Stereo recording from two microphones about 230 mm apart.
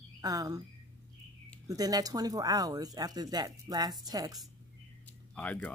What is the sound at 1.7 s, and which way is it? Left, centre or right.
Speech, centre.